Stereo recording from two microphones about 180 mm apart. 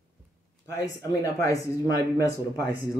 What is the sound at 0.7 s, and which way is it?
Speech, 20° left (ahead or behind).